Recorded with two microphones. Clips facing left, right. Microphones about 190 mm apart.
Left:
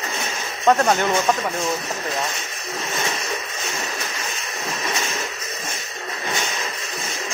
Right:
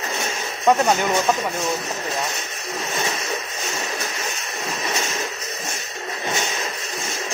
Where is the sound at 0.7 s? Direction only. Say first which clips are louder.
Even; 10° right (ahead or behind).